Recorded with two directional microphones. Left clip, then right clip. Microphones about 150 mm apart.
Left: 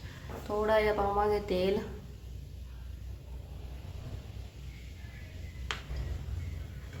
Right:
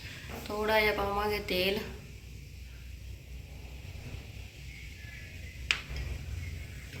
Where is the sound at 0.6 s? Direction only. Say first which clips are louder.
Even; 25° left (ahead or behind).